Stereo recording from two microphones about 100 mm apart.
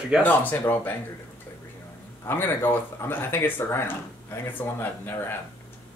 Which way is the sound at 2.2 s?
25° left (ahead or behind).